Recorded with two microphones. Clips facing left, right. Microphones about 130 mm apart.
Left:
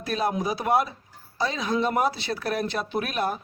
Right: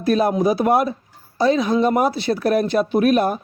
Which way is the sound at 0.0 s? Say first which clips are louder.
Right 9 dB; 45° right (ahead or behind).